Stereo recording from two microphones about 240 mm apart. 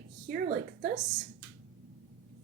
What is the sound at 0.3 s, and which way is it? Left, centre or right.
Speech, right.